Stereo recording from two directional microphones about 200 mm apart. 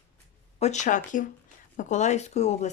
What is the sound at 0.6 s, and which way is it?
Speech, 35° left (ahead or behind).